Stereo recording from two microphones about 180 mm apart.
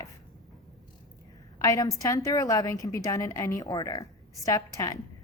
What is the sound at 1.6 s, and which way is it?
A woman's voice, 20° left (ahead or behind).